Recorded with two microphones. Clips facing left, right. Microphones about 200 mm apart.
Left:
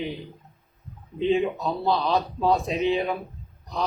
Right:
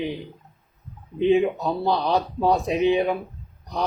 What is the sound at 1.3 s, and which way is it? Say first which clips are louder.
Speech: right 4 dB; 15° right (ahead or behind).